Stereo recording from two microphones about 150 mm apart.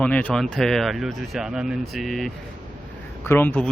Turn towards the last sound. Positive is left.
turn(degrees=10)  # may be behind; listen again after turning